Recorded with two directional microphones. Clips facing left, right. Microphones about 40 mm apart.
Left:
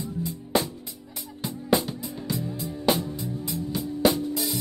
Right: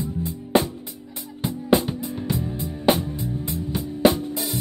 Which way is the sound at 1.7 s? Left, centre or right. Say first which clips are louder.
Right 4 dB; right.